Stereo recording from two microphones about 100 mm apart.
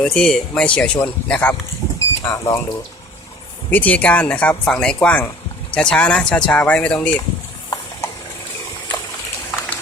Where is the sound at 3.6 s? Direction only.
15° left (ahead or behind).